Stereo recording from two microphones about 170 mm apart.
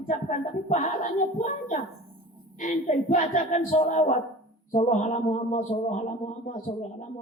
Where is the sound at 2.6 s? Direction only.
50° left (ahead or behind).